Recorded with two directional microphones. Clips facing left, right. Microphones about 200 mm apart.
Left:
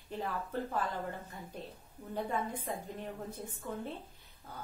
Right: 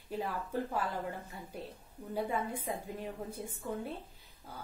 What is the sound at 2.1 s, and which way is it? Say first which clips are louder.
A woman's voice: right 1 dB; 10° right (ahead or behind).